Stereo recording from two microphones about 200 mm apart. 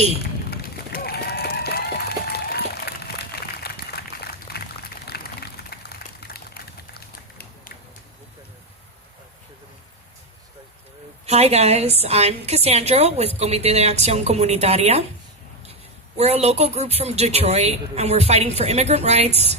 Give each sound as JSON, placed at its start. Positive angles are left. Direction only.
{"t": 0.2, "sound": "run", "side_deg": 50}
{"t": 3.6, "sound": "a sound", "side_deg": 55}
{"t": 11.3, "sound": "a woman's voice", "side_deg": -30}
{"t": 16.1, "sound": "a woman's voice", "side_deg": -30}